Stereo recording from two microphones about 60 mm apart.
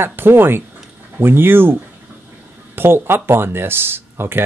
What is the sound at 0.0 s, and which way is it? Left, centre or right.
Speech, right.